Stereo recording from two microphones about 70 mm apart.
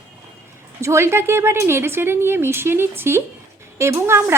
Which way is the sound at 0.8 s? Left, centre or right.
Right.